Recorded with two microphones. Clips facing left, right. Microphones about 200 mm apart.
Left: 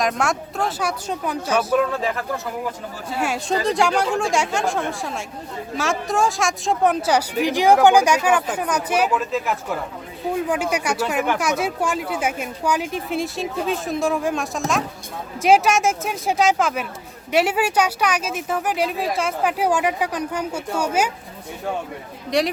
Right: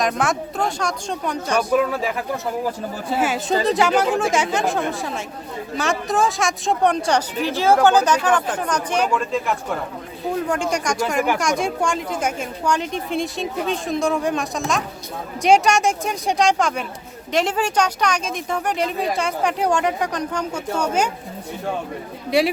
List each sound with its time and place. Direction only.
0.0 s a woman's voice: centre (ahead or behind)
22.3 s a woman's voice: 5° right (ahead or behind)